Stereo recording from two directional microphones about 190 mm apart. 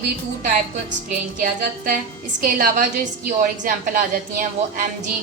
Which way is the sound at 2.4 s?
50° right (ahead or behind).